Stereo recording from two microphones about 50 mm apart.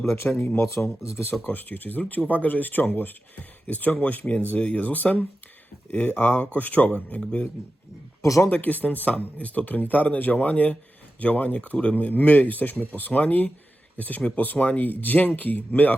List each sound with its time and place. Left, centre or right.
0.1 s speech: left
0.6 s speech: left
1.5 s speech: left
8.2 s speech: left
8.4 s speech: left